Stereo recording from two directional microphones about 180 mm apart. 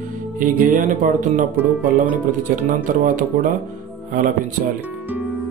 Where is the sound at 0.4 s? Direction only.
50° right (ahead or behind).